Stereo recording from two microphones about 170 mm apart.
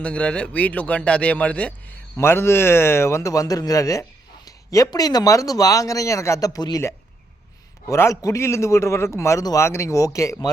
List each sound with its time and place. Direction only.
0.0 s speech: 5° left (ahead or behind)